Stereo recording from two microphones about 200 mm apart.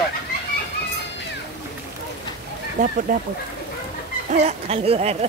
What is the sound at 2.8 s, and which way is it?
Speech, 40° right (ahead or behind).